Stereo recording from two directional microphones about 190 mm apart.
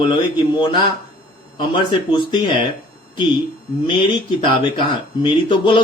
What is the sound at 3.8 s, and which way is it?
Speech, 25° left (ahead or behind).